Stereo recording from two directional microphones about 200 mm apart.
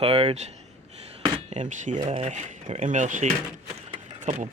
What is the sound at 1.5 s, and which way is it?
Speech, 35° right (ahead or behind).